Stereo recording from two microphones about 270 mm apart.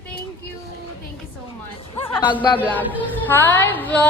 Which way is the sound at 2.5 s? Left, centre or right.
Centre.